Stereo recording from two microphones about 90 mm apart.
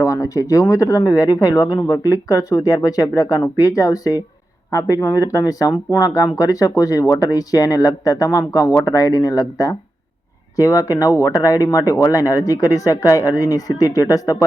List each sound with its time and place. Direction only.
0.0 s speech: 35° left (ahead or behind)